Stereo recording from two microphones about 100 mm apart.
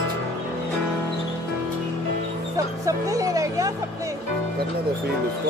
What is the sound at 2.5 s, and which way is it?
Speech, 35° right (ahead or behind).